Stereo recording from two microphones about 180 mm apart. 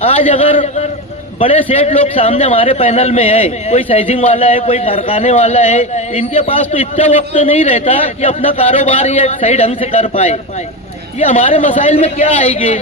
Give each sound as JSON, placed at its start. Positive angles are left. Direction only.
{"t": 0.0, "sound": "a man's voice", "side_deg": 30}
{"t": 11.6, "sound": "a man's voice", "side_deg": 45}